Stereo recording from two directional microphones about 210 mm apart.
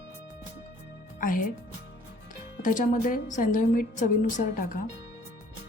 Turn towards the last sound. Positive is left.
turn(degrees=35)  # may be behind; listen again after turning